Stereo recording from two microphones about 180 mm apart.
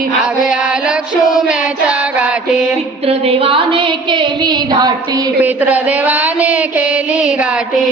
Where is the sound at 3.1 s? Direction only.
30° right (ahead or behind).